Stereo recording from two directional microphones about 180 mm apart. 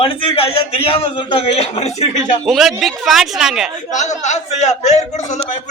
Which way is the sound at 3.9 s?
40° left (ahead or behind).